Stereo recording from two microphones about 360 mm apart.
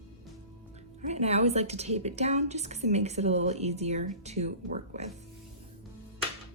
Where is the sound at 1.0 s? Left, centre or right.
Centre.